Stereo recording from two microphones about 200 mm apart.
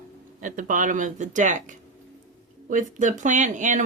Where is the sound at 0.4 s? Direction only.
40° right (ahead or behind).